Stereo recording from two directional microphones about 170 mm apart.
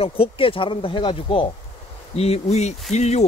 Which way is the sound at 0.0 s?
35° left (ahead or behind).